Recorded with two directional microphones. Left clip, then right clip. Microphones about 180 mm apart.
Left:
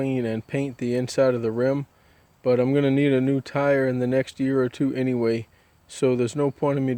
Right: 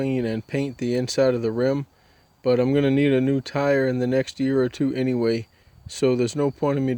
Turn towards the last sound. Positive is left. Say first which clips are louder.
# even
turn(degrees=-15)  # may be behind; listen again after turning